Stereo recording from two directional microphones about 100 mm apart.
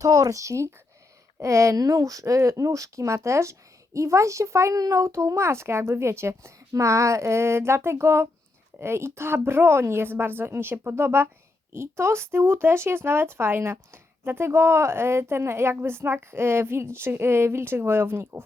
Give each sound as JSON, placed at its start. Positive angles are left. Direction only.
{"t": 0.0, "sound": "speech", "side_deg": -35}